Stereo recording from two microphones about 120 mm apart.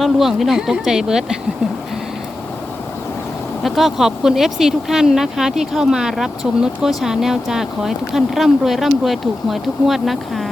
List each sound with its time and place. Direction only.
0.0 s speech: centre (ahead or behind)
3.6 s speech: centre (ahead or behind)